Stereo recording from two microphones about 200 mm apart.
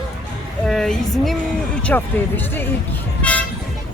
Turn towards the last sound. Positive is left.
turn(degrees=5)  # may be behind; listen again after turning